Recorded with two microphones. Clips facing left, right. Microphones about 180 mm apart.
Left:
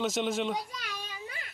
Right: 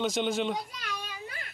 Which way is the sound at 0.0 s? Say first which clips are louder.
Right 1 dB; centre (ahead or behind).